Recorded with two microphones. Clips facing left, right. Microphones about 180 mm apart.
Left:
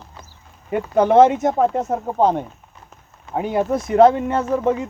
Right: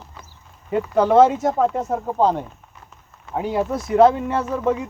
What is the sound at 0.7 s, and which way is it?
Speech, 20° left (ahead or behind).